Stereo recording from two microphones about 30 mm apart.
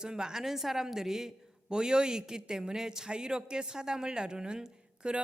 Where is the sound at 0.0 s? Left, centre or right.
Right.